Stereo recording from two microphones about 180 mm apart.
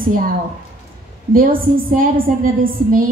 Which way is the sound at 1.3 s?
50° right (ahead or behind).